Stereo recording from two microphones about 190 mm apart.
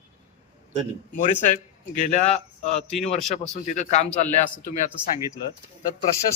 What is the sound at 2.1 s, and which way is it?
Speech, 35° left (ahead or behind).